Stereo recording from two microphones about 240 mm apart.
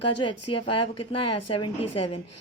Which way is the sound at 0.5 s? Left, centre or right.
Left.